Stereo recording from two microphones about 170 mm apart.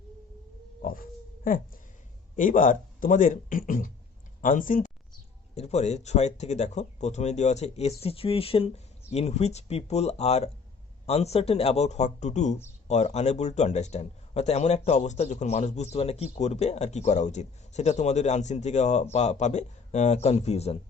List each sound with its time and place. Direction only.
0.8 s a sound: 55° left (ahead or behind)
2.3 s speech: 50° left (ahead or behind)
5.5 s a man's voice: 40° left (ahead or behind)